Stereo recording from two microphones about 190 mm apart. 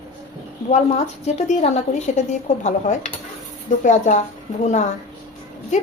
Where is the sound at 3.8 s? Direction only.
40° left (ahead or behind).